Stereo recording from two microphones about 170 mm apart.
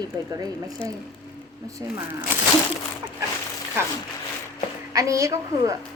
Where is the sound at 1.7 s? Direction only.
20° right (ahead or behind).